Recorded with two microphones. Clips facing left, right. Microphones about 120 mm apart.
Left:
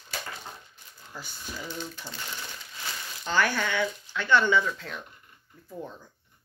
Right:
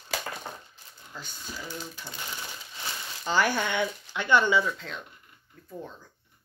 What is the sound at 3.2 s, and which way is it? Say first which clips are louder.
Speech: right 1 dB; 15° right (ahead or behind).